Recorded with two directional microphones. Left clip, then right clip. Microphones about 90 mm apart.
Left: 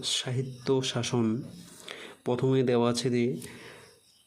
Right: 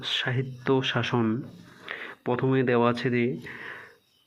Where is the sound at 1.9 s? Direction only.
40° left (ahead or behind).